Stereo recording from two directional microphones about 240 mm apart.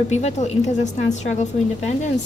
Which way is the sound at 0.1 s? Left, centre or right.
Left.